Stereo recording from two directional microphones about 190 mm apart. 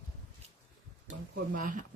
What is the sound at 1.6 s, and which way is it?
Speech, 45° right (ahead or behind).